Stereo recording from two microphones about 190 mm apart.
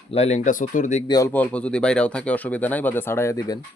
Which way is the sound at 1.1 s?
15° left (ahead or behind).